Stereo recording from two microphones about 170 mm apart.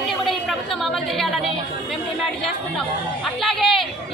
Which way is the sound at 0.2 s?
Centre (ahead or behind).